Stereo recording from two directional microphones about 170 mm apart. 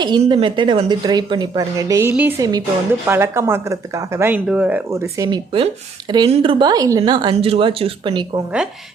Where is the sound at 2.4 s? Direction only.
20° right (ahead or behind).